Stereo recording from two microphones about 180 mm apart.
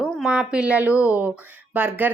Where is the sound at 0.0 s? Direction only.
5° right (ahead or behind).